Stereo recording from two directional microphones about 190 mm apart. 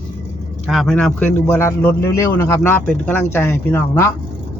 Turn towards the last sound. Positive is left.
turn(degrees=15)  # may be behind; listen again after turning